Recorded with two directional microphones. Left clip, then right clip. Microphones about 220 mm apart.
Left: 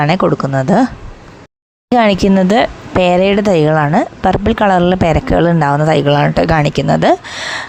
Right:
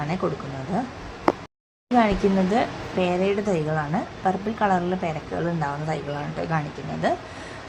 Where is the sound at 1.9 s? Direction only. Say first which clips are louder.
Left 10 dB; 45° left (ahead or behind).